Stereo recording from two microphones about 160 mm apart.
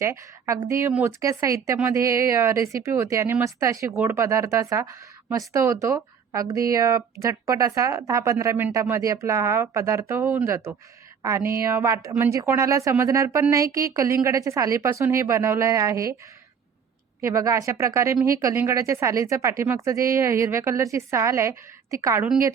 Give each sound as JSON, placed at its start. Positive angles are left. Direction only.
{"t": 0.0, "sound": "speech", "side_deg": -20}
{"t": 17.2, "sound": "speech", "side_deg": -20}